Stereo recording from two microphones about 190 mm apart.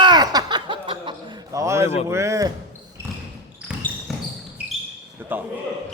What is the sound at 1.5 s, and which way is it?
A man's voice, 15° right (ahead or behind).